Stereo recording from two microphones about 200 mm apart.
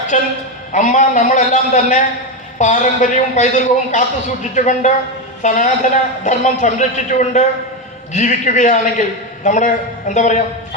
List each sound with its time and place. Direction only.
0.1 s a man's voice: 40° left (ahead or behind)